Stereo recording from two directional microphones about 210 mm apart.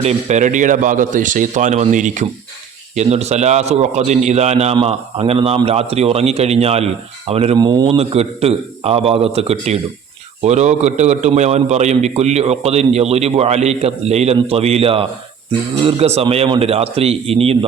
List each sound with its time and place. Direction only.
0.0 s a man's voice: 30° right (ahead or behind)